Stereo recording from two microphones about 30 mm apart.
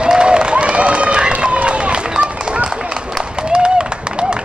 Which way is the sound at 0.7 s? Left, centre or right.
Right.